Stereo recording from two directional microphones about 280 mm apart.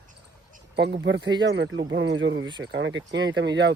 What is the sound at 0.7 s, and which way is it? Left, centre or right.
Speech, right.